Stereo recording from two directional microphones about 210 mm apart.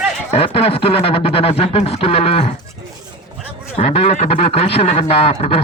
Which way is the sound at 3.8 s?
30° left (ahead or behind).